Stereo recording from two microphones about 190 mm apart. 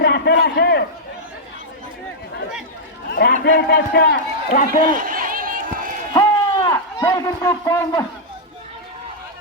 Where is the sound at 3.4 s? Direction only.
60° left (ahead or behind).